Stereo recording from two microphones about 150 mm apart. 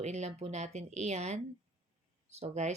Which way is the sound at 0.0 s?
50° right (ahead or behind).